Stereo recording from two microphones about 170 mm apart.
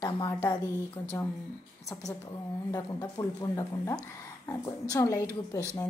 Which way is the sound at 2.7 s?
20° left (ahead or behind).